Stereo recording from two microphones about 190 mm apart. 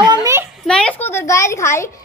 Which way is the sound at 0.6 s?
5° left (ahead or behind).